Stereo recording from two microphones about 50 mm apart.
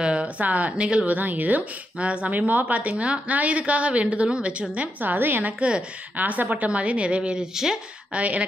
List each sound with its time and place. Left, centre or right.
0.0 s speech: right
1.1 s a woman's voice: right
5.0 s a woman's voice: right
5.6 s a woman's voice: right
6.1 s a woman's voice: right
7.5 s speech: centre
8.1 s a woman's voice: right